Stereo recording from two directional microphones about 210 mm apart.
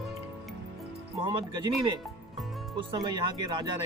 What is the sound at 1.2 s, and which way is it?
Speech, 20° right (ahead or behind).